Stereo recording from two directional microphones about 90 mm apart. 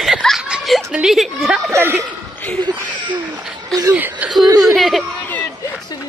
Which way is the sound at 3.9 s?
20° right (ahead or behind).